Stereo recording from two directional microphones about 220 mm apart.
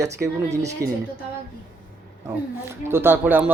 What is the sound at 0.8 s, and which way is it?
Speech, 45° right (ahead or behind).